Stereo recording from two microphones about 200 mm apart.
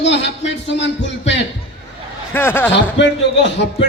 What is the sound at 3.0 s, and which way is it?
Speech, 60° left (ahead or behind).